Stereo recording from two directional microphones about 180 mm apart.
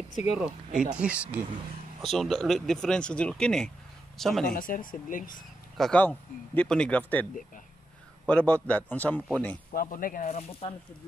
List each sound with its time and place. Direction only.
0.1 s speech: 35° left (ahead or behind)
0.4 s speech: 5° right (ahead or behind)
4.6 s speech: 50° left (ahead or behind)
5.8 s speech: 5° left (ahead or behind)
8.3 s speech: 5° left (ahead or behind)
9.7 s speech: 50° left (ahead or behind)
10.6 s speech: 30° left (ahead or behind)